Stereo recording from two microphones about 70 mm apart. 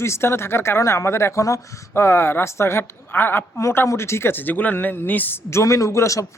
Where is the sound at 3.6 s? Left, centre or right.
Left.